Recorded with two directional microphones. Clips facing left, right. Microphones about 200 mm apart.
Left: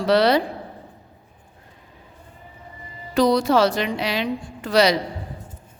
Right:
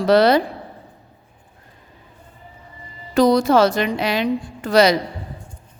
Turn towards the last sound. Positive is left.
turn(degrees=-50)  # may be behind; listen again after turning